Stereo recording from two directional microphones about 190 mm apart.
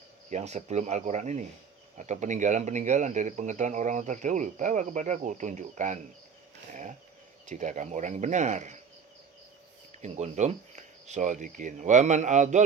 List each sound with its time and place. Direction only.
0.3 s speech: 35° right (ahead or behind)
7.4 s speech: 40° right (ahead or behind)
10.0 s speech: 40° right (ahead or behind)